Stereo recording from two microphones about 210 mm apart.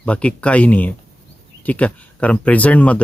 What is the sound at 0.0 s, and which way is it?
Speech, 5° left (ahead or behind).